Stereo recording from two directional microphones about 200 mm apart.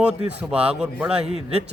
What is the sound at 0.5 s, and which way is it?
Speech, 5° right (ahead or behind).